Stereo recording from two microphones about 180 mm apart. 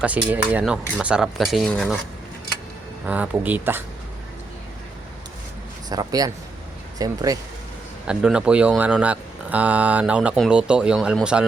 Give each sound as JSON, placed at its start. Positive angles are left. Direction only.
{"t": 0.0, "sound": "speech", "side_deg": -10}
{"t": 3.1, "sound": "speech", "side_deg": -10}
{"t": 5.9, "sound": "speech", "side_deg": -20}
{"t": 8.0, "sound": "speech", "side_deg": -5}